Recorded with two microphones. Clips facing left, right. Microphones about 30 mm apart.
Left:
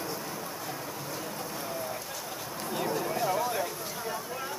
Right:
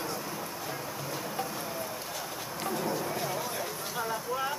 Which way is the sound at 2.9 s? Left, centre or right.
Centre.